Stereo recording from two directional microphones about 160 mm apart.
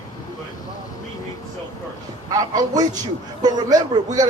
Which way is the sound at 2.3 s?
25° right (ahead or behind).